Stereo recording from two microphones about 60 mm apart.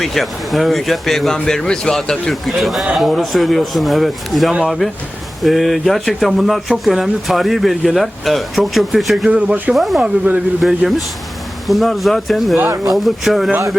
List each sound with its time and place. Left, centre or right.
0.0 s speech: centre
2.3 s speech: centre
9.3 s speech: right
9.7 s speech: centre
10.0 s speech: right
10.6 s speech: centre
12.6 s speech: right
12.9 s speech: centre